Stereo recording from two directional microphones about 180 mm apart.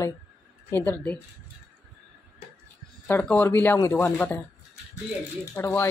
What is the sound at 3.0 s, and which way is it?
Speech, 10° left (ahead or behind).